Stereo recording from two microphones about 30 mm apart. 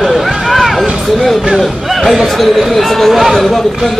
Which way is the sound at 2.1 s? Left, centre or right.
Centre.